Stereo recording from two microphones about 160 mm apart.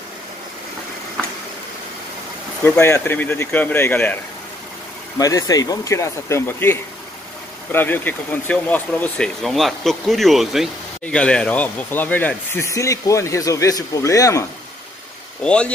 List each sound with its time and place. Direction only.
2.8 s speech: 15° left (ahead or behind)
5.2 s speech: 20° left (ahead or behind)
15.4 s speech: 5° left (ahead or behind)